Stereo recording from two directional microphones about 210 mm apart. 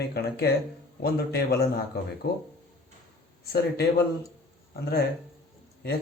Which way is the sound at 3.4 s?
50° left (ahead or behind).